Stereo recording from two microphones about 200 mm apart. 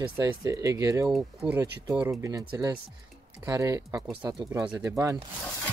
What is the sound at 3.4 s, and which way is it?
Speech, 15° right (ahead or behind).